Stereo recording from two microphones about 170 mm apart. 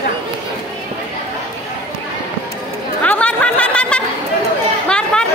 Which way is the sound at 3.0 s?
10° left (ahead or behind).